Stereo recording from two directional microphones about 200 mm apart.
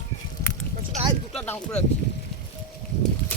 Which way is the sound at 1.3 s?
5° left (ahead or behind).